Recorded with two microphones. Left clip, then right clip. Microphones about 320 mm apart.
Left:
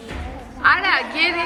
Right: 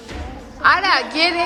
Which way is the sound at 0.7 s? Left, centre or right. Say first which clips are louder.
Right 2 dB; centre.